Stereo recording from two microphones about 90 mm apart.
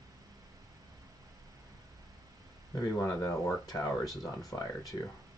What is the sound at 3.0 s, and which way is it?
Speech, 35° left (ahead or behind).